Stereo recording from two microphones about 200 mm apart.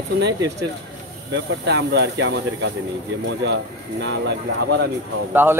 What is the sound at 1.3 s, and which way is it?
Speech, 65° right (ahead or behind).